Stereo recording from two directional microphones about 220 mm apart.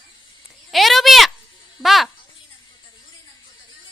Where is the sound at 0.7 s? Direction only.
Centre (ahead or behind).